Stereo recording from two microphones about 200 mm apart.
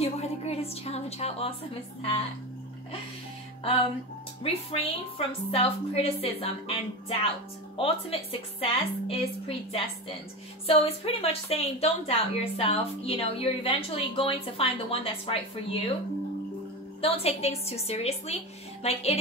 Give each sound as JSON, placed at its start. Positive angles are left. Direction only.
{"t": 0.0, "sound": "a woman's voice", "side_deg": 30}
{"t": 4.4, "sound": "speech", "side_deg": 30}
{"t": 17.0, "sound": "a woman's voice", "side_deg": 30}